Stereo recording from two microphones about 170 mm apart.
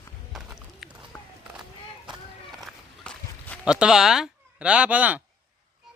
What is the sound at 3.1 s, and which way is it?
Walk, 5° left (ahead or behind).